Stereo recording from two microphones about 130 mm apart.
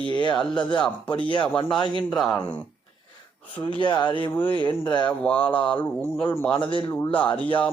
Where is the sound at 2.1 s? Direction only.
5° left (ahead or behind).